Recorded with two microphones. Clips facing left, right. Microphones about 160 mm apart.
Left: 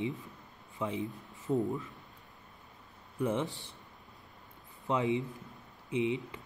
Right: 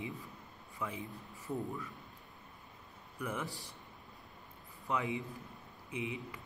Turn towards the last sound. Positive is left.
turn(degrees=25)  # may be behind; listen again after turning